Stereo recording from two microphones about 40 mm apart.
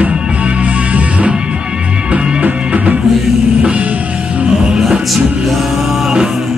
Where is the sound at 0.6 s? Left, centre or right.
Right.